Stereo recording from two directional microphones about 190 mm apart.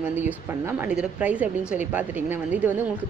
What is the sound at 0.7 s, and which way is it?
A woman's voice, 5° right (ahead or behind).